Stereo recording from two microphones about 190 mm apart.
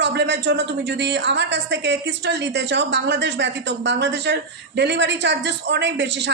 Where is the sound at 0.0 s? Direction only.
65° right (ahead or behind).